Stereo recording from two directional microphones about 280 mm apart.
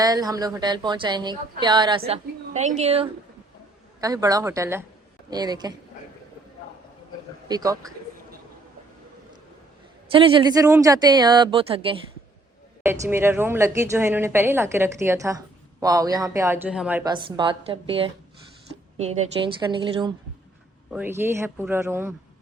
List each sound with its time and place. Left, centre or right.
0.0 s a woman's voice: centre
7.4 s a woman's voice: centre
10.1 s a woman's voice: centre
12.8 s a woman's voice: centre